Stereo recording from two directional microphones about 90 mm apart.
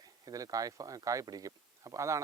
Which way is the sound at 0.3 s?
40° right (ahead or behind).